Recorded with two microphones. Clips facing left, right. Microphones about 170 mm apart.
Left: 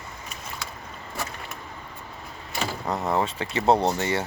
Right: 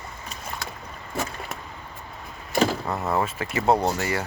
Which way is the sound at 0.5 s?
60° right (ahead or behind).